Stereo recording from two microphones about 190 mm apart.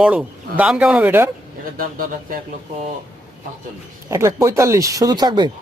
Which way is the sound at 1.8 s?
45° right (ahead or behind).